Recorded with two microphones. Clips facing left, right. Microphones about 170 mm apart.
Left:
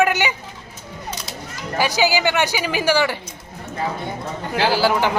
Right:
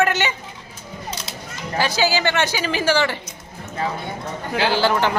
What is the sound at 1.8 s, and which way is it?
Speech, 15° left (ahead or behind).